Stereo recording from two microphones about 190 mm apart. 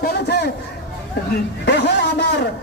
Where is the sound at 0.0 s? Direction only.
60° left (ahead or behind).